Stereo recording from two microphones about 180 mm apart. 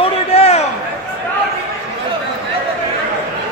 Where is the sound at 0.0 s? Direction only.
35° left (ahead or behind).